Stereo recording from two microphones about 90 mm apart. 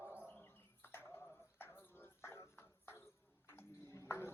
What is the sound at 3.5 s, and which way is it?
Clip-clop, 30° left (ahead or behind).